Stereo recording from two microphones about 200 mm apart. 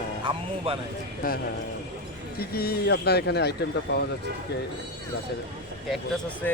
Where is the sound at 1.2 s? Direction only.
45° left (ahead or behind).